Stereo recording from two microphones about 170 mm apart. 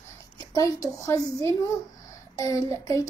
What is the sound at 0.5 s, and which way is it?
A woman's voice, 20° left (ahead or behind).